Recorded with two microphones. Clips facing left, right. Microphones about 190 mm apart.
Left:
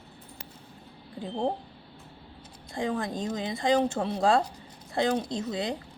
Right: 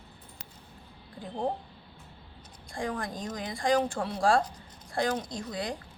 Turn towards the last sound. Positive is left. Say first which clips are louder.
# left 4 dB
turn(degrees=20)  # may be behind; listen again after turning